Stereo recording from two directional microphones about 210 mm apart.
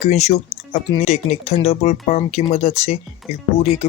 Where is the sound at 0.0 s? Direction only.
30° left (ahead or behind).